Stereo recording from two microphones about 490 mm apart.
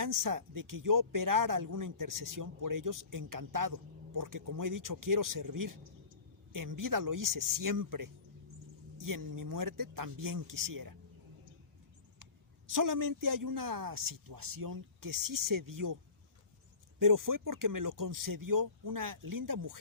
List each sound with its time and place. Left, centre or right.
0.0 s speech: right
12.6 s speech: right
17.0 s speech: right